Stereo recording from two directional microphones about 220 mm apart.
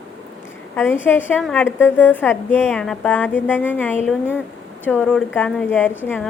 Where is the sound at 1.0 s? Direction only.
10° left (ahead or behind).